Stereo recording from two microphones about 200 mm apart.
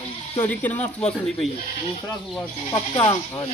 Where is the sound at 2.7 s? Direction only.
20° left (ahead or behind).